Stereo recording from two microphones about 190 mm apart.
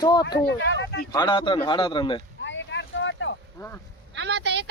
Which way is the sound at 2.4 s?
75° left (ahead or behind).